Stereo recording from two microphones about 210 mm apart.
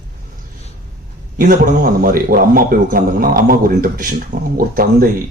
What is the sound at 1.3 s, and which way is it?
A man's voice, 40° right (ahead or behind).